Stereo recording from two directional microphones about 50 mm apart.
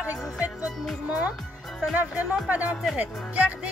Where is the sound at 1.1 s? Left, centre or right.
Right.